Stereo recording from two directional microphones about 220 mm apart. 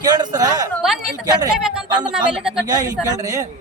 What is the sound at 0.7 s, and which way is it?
Speech, centre (ahead or behind).